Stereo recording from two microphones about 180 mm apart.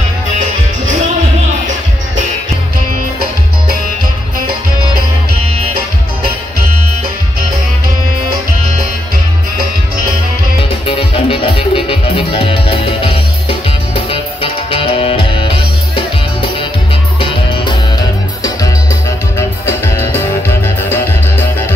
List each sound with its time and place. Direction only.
10.9 s music: 30° left (ahead or behind)
17.2 s music: 30° left (ahead or behind)
19.3 s music: 15° left (ahead or behind)